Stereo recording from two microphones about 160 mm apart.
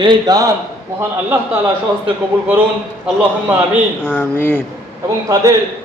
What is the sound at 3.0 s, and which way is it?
Speech, 10° right (ahead or behind).